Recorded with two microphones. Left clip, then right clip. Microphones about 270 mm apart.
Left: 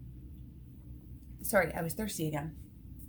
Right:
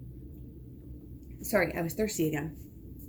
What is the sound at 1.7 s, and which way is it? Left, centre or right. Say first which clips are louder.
Speech: right 6 dB; left.